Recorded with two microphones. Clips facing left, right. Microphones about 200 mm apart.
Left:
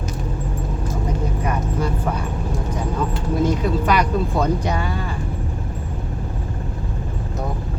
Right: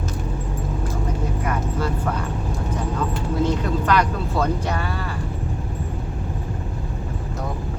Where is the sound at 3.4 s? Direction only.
10° left (ahead or behind).